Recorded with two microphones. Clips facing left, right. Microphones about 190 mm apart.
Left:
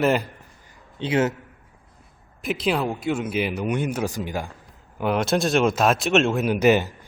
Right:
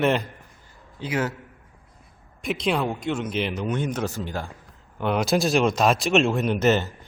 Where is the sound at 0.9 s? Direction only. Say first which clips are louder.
Left 5 dB; 25° left (ahead or behind).